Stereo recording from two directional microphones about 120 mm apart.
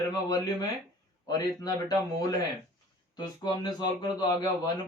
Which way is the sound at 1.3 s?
35° left (ahead or behind).